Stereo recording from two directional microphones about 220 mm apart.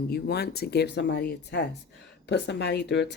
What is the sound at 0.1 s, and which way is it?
Speech, 45° left (ahead or behind).